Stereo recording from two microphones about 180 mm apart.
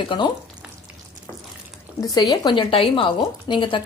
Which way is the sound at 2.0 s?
20° left (ahead or behind).